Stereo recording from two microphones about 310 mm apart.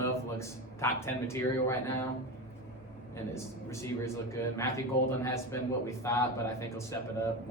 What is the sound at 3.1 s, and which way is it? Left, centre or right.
Speech, centre.